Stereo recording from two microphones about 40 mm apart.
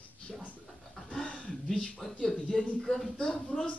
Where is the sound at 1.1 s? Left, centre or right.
Left.